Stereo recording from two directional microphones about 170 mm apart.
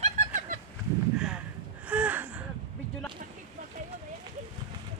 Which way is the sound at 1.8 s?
10° right (ahead or behind).